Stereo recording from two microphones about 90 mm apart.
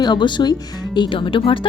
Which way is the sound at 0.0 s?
55° left (ahead or behind).